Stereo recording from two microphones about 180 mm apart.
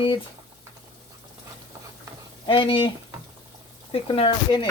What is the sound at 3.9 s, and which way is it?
Speech, 30° left (ahead or behind).